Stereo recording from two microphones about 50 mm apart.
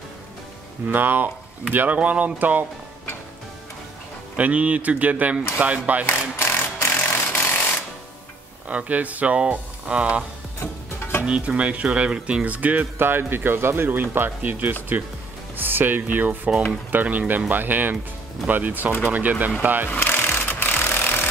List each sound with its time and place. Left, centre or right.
0.8 s speech: right
2.0 s speech: right
4.4 s speech: right
6.0 s a sound: left
8.6 s speech: right
11.2 s speech: right
12.4 s speech: right
13.0 s speech: right
19.9 s wood: left